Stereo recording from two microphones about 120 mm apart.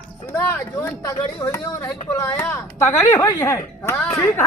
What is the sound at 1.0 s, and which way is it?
A woman's voice, 30° left (ahead or behind).